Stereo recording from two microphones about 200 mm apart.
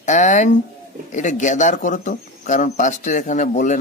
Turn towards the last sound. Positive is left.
turn(degrees=40)  # may be behind; listen again after turning